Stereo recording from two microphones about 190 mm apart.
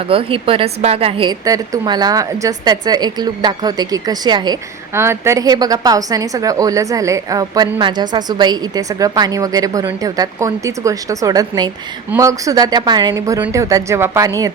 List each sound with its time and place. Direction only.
0.1 s a woman's voice: 30° right (ahead or behind)